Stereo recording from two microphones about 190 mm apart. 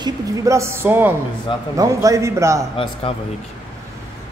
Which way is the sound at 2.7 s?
30° left (ahead or behind).